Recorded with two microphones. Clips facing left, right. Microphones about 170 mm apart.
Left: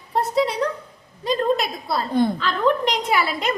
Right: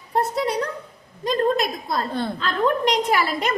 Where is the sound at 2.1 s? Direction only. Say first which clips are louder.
Left 7 dB; 15° left (ahead or behind).